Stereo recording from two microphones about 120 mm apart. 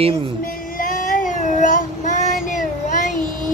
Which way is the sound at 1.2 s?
90° left.